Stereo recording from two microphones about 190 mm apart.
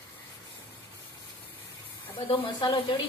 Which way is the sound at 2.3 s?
25° left (ahead or behind).